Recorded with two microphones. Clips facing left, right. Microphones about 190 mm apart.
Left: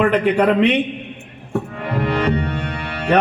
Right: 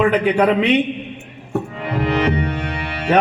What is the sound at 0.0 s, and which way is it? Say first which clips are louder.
Speech: even; 10° right (ahead or behind).